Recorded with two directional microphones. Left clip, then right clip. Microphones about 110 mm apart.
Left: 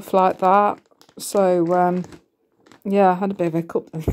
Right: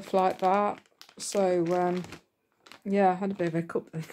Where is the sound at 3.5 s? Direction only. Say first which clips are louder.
Left 8 dB; 30° left (ahead or behind).